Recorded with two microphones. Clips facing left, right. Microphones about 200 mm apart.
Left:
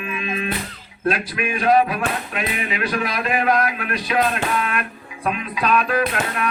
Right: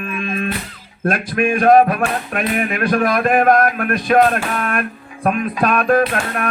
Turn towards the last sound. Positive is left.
turn(degrees=-50)  # may be behind; listen again after turning